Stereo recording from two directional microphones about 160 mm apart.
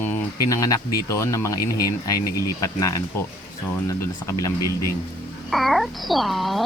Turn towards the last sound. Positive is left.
turn(degrees=0)  # may be behind; listen again after turning